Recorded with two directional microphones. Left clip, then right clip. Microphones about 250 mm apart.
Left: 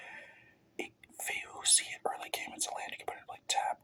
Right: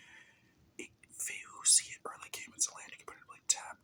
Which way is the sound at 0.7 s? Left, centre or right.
Right.